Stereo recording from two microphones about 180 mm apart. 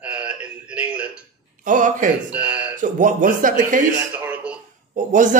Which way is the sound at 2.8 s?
45° right (ahead or behind).